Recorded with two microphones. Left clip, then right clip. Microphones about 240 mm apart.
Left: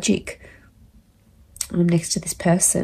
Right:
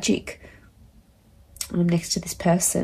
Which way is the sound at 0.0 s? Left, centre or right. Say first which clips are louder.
Left 2 dB; left.